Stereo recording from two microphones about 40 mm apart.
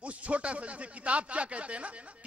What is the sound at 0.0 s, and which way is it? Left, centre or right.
Speech, right.